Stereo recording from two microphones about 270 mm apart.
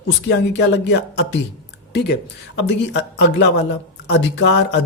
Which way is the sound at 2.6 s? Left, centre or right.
Left.